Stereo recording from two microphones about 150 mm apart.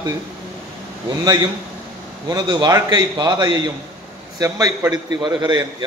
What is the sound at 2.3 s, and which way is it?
A man's voice, 25° right (ahead or behind).